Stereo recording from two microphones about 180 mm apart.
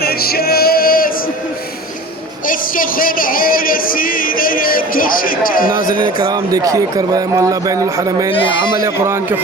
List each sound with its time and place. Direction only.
0.0 s music: 60° left (ahead or behind)
2.5 s speech: 50° left (ahead or behind)
6.2 s a man's voice: 20° right (ahead or behind)
8.3 s a man's voice: 30° left (ahead or behind)
8.8 s a man's voice: 15° right (ahead or behind)